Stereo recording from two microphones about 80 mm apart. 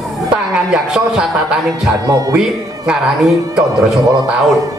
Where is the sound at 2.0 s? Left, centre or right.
Right.